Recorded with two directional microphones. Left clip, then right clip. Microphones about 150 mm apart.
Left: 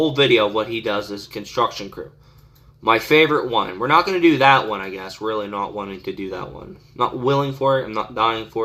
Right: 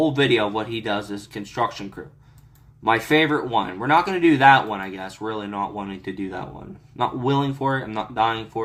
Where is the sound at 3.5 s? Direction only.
30° right (ahead or behind).